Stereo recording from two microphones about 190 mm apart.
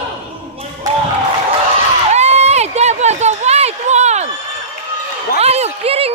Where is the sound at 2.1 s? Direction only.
35° right (ahead or behind).